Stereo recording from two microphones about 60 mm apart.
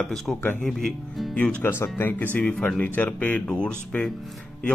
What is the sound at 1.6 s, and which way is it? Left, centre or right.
Speech, left.